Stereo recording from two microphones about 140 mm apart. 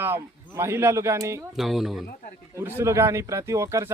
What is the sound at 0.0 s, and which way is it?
Speech, 20° right (ahead or behind).